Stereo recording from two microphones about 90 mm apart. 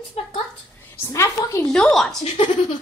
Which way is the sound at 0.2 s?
90° left.